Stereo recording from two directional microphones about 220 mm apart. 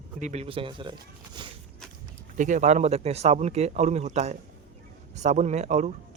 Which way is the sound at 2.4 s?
35° right (ahead or behind).